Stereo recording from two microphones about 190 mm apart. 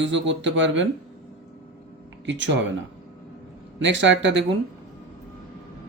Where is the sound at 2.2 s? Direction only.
75° right (ahead or behind).